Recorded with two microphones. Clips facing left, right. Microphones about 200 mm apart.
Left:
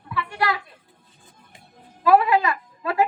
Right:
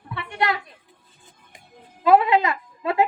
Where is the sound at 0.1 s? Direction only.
25° right (ahead or behind).